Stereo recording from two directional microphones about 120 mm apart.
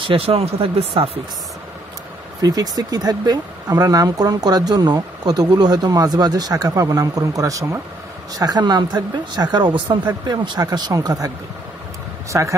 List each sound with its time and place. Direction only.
0.0 s speech: 50° right (ahead or behind)
2.4 s speech: 30° right (ahead or behind)